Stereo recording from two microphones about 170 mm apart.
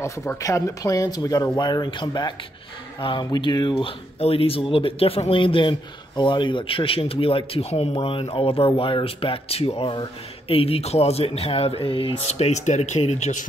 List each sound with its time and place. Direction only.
0.0 s speech: 15° left (ahead or behind); by 13.5 s 45° left (ahead or behind)